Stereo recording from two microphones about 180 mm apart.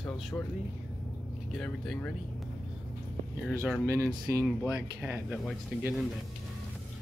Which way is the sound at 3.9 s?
20° right (ahead or behind).